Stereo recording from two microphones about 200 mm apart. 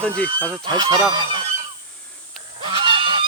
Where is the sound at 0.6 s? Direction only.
20° right (ahead or behind).